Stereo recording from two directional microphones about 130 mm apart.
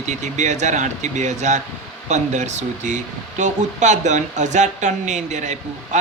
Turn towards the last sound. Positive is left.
turn(degrees=-65)  # may be behind; listen again after turning